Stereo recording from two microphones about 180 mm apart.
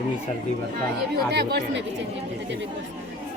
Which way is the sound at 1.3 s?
65° right (ahead or behind).